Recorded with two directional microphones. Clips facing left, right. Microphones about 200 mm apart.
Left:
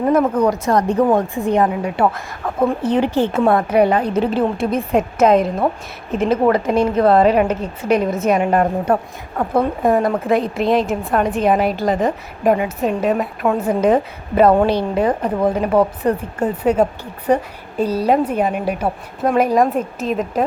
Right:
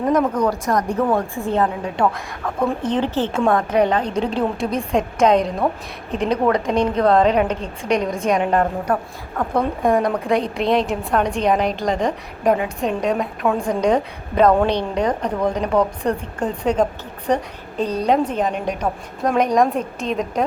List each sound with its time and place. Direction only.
0.1 s speech: 5° left (ahead or behind)
0.5 s speech: 25° left (ahead or behind)
1.5 s speech: 15° left (ahead or behind)
1.7 s a woman's voice: 5° left (ahead or behind)
8.9 s speech: 25° left (ahead or behind)
9.4 s a woman's voice: 5° left (ahead or behind)